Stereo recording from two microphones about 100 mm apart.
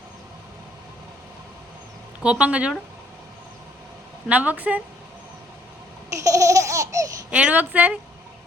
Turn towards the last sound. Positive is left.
turn(degrees=-15)  # may be behind; listen again after turning